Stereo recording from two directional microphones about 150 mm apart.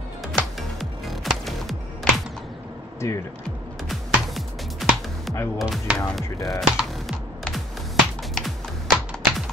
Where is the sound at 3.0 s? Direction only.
20° left (ahead or behind).